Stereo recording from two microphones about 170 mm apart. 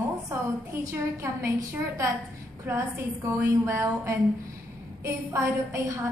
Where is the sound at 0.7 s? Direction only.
15° right (ahead or behind).